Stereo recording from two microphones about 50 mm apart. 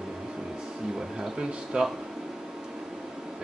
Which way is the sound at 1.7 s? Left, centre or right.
Centre.